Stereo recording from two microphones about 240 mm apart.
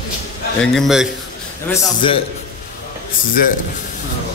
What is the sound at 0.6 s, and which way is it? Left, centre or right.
Speech, centre.